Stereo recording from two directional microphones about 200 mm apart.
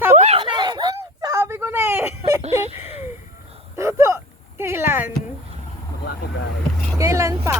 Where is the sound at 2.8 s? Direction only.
35° left (ahead or behind).